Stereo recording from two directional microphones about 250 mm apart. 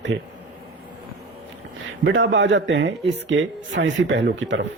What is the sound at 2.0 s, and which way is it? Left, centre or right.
Speech, right.